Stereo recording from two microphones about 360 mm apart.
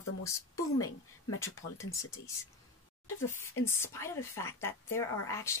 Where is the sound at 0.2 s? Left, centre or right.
Centre.